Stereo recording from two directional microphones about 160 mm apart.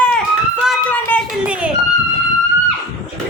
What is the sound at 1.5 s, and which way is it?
Speech, 5° right (ahead or behind).